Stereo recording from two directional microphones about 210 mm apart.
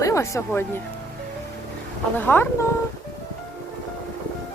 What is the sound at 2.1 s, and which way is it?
Speech, 10° left (ahead or behind).